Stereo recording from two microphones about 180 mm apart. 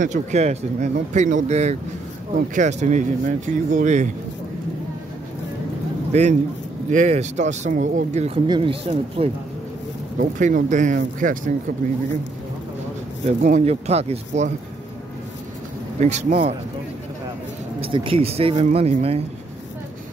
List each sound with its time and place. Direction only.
0.0 s speech: 40° right (ahead or behind)
6.1 s speech: 40° right (ahead or behind)
8.5 s speech: 30° right (ahead or behind)
10.1 s speech: 50° right (ahead or behind)
13.4 s speech: 40° right (ahead or behind)
16.0 s speech: 40° right (ahead or behind)
17.7 s speech: 30° right (ahead or behind)